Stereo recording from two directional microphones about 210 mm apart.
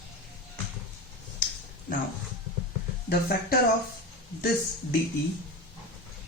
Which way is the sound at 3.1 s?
45° left (ahead or behind).